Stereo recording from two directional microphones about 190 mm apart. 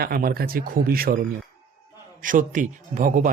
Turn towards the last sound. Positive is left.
turn(degrees=-45)  # may be behind; listen again after turning